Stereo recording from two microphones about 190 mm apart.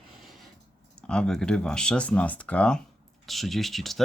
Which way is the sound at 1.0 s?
5° left (ahead or behind).